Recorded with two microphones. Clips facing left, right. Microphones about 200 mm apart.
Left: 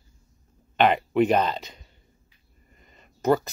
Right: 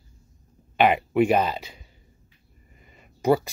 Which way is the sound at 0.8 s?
10° right (ahead or behind).